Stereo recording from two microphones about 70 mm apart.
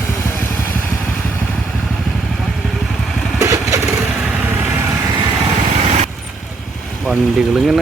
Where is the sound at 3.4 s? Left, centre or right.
Right.